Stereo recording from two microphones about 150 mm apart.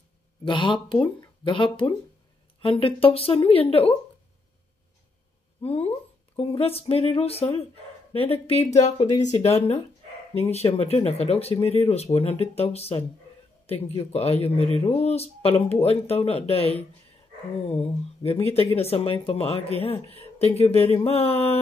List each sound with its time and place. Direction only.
0.5 s speech: 35° left (ahead or behind)
5.6 s speech: 40° left (ahead or behind)